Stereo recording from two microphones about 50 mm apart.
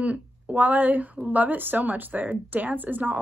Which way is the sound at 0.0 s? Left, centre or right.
Right.